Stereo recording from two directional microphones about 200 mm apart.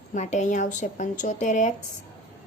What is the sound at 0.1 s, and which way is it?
A woman's voice, 35° left (ahead or behind).